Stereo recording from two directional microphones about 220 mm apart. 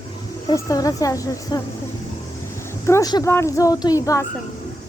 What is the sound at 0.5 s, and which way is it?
Speech, 15° left (ahead or behind).